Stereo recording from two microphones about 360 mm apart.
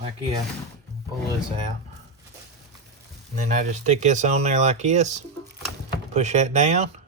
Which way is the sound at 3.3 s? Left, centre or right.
Centre.